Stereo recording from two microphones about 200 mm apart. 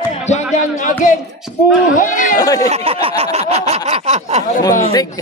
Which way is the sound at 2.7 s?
30° right (ahead or behind).